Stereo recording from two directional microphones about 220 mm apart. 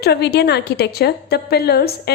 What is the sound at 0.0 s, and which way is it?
A woman's voice, 50° left (ahead or behind).